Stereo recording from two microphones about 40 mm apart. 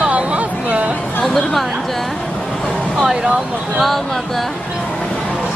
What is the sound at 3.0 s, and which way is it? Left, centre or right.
Speech, centre.